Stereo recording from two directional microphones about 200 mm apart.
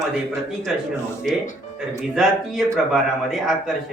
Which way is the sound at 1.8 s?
Centre (ahead or behind).